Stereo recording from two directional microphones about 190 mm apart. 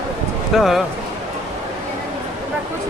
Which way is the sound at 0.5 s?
Centre (ahead or behind).